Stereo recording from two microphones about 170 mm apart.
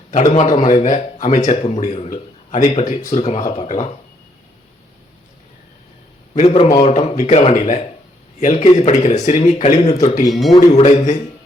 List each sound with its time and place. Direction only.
0.1 s a man's voice: 50° left (ahead or behind)
6.3 s speech: 40° left (ahead or behind)
10.2 s speech: centre (ahead or behind)
10.8 s speech: 45° left (ahead or behind)